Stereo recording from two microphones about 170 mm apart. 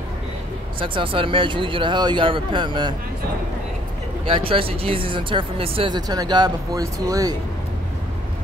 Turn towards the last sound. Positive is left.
turn(degrees=-20)  # may be behind; listen again after turning